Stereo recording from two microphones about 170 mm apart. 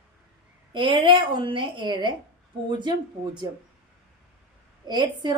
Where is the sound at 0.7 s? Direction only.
30° right (ahead or behind).